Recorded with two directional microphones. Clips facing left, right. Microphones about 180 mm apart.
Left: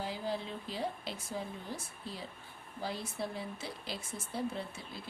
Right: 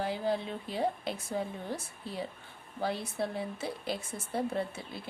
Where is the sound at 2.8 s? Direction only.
60° right (ahead or behind).